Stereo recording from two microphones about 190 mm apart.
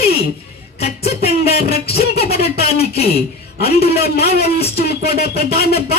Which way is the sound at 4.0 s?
55° left (ahead or behind).